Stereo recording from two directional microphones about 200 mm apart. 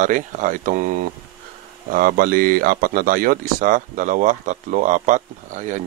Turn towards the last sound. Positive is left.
turn(degrees=-40)  # may be behind; listen again after turning